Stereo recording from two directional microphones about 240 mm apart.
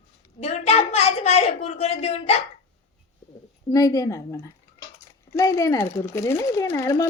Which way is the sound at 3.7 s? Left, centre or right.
Centre.